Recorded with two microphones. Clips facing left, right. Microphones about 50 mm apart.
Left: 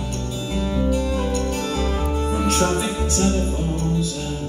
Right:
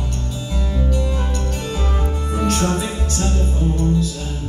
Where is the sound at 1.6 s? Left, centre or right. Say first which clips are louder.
Left 2 dB; centre.